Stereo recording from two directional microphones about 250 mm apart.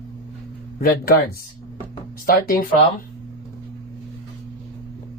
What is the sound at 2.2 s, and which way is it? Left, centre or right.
Speech, left.